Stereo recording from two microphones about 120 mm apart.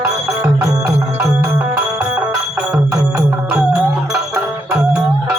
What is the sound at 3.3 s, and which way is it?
Music, 5° right (ahead or behind).